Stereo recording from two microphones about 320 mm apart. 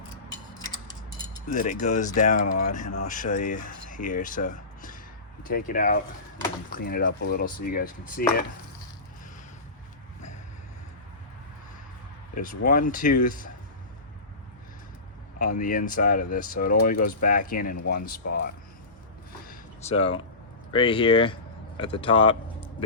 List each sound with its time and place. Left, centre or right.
1.5 s speech: left
12.3 s speech: left
15.4 s speech: left
19.5 s a sound: centre
20.7 s speech: centre